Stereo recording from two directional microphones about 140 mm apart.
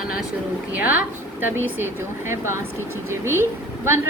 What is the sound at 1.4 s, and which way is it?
A woman's voice, 20° right (ahead or behind).